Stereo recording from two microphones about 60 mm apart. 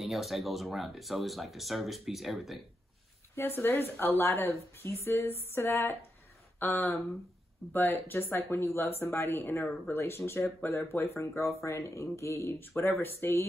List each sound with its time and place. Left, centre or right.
0.0 s speech: centre
3.3 s speech: left
4.8 s a sound: left
6.6 s speech: left
11.4 s speech: left
12.6 s speech: left